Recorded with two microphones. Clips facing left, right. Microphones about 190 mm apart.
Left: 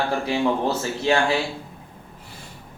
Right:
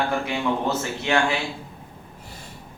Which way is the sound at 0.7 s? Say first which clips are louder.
Left 2 dB; 30° left (ahead or behind).